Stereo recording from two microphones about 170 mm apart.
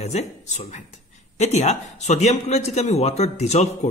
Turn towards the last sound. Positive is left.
turn(degrees=40)  # may be behind; listen again after turning